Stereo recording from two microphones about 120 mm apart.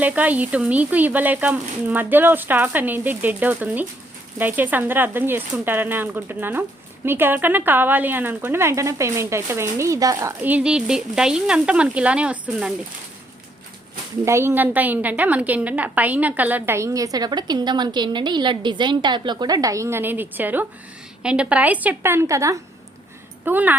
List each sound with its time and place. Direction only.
0.0 s speech: 15° right (ahead or behind)
10.4 s speech: 10° right (ahead or behind)
14.3 s a woman's voice: 20° right (ahead or behind)
23.5 s speech: 15° right (ahead or behind)